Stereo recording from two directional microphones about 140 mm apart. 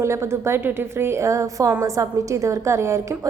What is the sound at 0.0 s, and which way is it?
A woman's voice, 20° right (ahead or behind).